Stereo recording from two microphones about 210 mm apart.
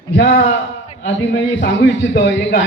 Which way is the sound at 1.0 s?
55° left (ahead or behind).